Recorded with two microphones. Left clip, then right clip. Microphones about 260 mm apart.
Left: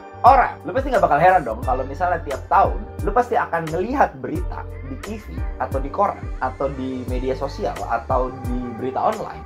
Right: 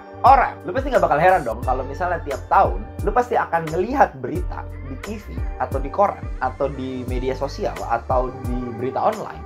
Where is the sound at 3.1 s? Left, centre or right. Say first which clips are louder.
Even; right.